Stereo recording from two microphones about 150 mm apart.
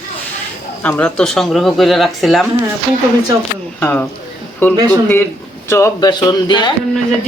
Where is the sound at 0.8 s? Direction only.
10° left (ahead or behind).